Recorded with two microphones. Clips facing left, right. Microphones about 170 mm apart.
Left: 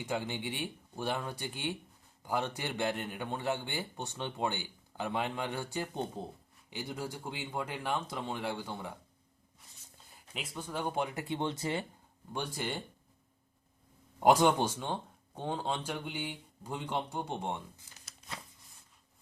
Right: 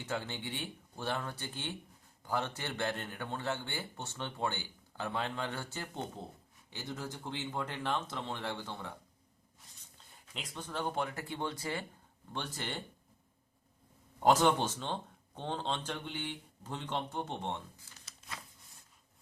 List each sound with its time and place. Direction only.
0.0 s a man's voice: 15° left (ahead or behind)
10.3 s a man's voice: 5° left (ahead or behind); by 11.9 s 20° left (ahead or behind)
12.3 s a man's voice: 10° left (ahead or behind)
14.2 s a man's voice: 15° left (ahead or behind)
17.9 s a sound: 15° left (ahead or behind)